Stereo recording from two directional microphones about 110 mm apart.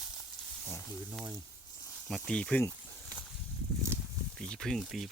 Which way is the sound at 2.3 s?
10° left (ahead or behind).